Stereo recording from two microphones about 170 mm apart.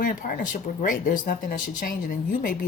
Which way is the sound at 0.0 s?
50° left (ahead or behind).